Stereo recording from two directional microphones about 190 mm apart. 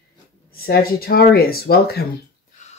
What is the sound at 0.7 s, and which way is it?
Speech, 50° left (ahead or behind).